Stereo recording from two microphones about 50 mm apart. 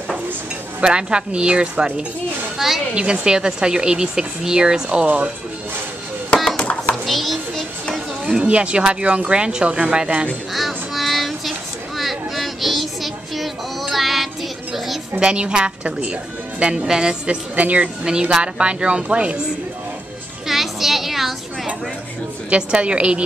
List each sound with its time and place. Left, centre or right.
0.7 s speech: centre
6.6 s a sound: left
7.1 s a sound: centre
8.3 s speech: right
10.5 s child singing: centre
12.0 s music: centre
15.1 s a woman's voice: right
17.6 s speech: right
18.0 s speech: centre
20.4 s a sound: centre
22.5 s speech: right